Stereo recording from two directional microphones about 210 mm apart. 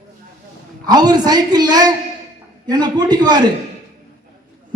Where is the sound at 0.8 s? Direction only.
20° right (ahead or behind).